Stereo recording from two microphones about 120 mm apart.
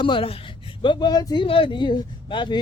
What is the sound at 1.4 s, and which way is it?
Speech, 50° left (ahead or behind).